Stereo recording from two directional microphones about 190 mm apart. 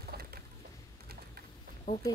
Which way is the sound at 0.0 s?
55° right (ahead or behind).